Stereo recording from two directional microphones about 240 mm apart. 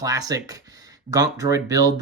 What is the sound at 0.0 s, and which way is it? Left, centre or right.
Speech, centre.